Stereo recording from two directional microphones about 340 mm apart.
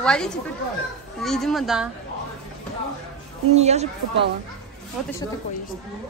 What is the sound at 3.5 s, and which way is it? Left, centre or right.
Speech, centre.